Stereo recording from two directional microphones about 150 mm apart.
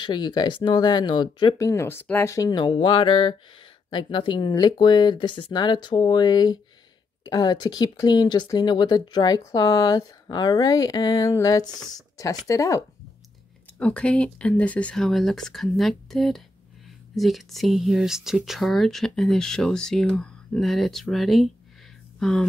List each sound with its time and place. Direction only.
0.0 s speech: 30° left (ahead or behind)
13.7 s speech: 5° left (ahead or behind)